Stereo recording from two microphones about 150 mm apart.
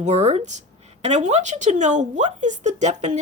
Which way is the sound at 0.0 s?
50° right (ahead or behind).